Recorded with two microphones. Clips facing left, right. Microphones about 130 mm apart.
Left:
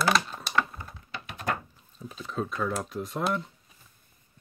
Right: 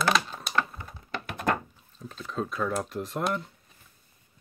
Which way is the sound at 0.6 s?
Centre (ahead or behind).